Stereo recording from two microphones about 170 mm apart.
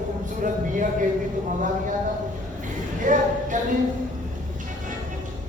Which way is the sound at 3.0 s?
50° right (ahead or behind).